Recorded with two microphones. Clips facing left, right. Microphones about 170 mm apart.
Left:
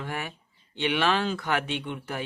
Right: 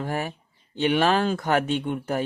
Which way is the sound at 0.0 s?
40° right (ahead or behind).